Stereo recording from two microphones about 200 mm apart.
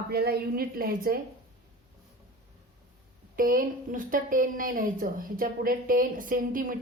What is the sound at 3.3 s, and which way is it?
A woman's voice, 45° right (ahead or behind).